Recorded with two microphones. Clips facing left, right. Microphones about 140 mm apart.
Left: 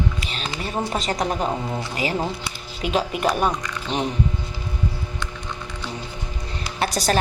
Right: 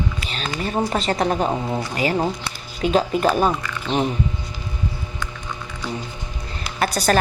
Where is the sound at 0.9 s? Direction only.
35° right (ahead or behind).